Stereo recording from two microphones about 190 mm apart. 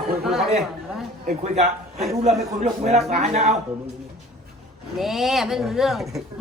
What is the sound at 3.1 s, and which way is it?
Speech, 35° right (ahead or behind).